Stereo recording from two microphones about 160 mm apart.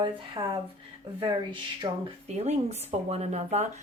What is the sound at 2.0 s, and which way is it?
Speech, 40° right (ahead or behind).